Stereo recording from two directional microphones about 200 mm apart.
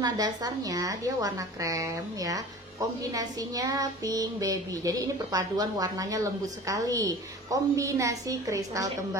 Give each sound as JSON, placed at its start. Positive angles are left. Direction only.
{"t": 0.0, "sound": "child singing", "side_deg": -20}